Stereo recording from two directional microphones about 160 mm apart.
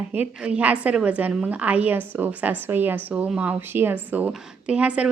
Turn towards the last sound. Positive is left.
turn(degrees=-10)  # may be behind; listen again after turning